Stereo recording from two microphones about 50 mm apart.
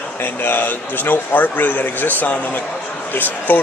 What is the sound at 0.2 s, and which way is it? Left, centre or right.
A man's voice, left.